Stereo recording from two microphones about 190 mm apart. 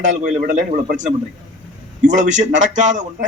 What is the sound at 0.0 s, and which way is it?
A man's voice, 40° right (ahead or behind).